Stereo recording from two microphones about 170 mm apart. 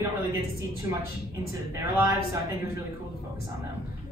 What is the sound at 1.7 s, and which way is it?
Speech, 15° right (ahead or behind).